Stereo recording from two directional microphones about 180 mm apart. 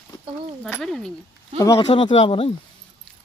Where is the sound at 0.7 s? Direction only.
5° left (ahead or behind).